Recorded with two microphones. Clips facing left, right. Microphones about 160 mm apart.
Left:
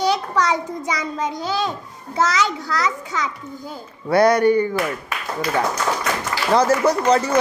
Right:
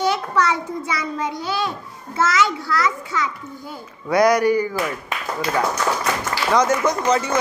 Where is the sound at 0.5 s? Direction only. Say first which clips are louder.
Left 1 dB; 40° left (ahead or behind).